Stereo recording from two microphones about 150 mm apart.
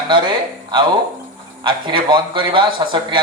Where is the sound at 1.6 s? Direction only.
30° right (ahead or behind).